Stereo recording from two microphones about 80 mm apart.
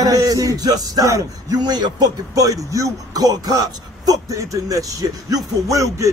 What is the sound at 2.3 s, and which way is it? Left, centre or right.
Speech, right.